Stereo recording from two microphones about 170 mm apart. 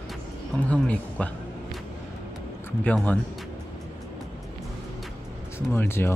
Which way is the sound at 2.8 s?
10° left (ahead or behind).